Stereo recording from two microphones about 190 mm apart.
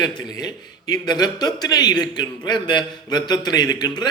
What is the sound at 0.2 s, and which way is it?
A man's voice, 20° left (ahead or behind).